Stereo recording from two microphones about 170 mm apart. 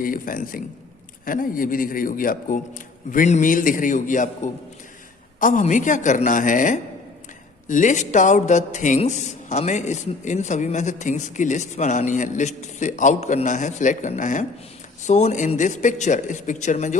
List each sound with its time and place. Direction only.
0.0 s a man's voice: 55° left (ahead or behind)
5.4 s speech: 50° left (ahead or behind)